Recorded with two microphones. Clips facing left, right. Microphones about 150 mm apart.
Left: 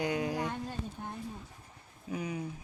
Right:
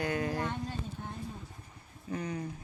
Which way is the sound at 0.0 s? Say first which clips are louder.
Even; 15° left (ahead or behind).